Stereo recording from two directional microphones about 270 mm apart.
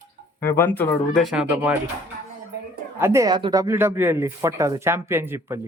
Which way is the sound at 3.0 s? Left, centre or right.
Centre.